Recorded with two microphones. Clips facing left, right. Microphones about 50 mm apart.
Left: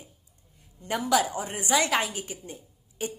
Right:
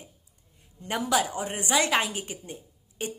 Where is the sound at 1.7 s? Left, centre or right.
Right.